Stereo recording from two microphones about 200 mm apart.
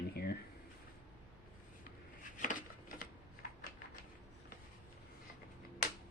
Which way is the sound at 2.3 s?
40° left (ahead or behind).